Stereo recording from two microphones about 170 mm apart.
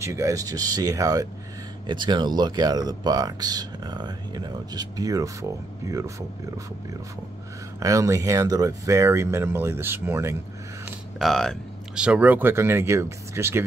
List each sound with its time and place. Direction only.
0.0 s speech: 20° right (ahead or behind)
7.8 s speech: 20° right (ahead or behind)
11.1 s speech: centre (ahead or behind); by 13.7 s 15° right (ahead or behind)